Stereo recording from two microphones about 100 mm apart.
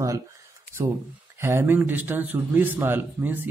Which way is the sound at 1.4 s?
25° right (ahead or behind).